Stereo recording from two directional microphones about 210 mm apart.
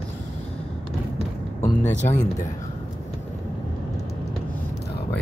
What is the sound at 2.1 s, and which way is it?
Speech, 15° left (ahead or behind).